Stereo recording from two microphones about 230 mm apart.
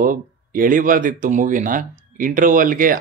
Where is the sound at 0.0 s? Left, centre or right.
Right.